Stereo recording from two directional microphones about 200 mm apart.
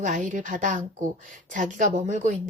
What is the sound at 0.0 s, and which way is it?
A woman's voice, 40° right (ahead or behind).